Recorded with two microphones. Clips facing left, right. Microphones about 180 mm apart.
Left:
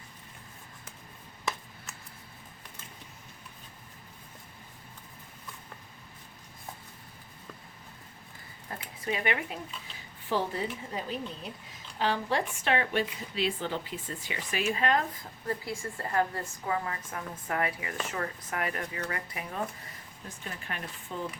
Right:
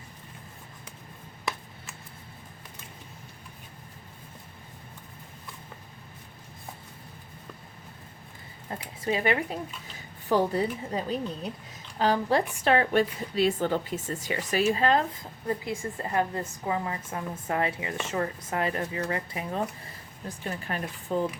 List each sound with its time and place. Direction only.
8.7 s a sound: 25° right (ahead or behind)
9.0 s speech: 30° right (ahead or behind)
15.4 s a woman's voice: 20° right (ahead or behind)
20.2 s speech: 40° right (ahead or behind)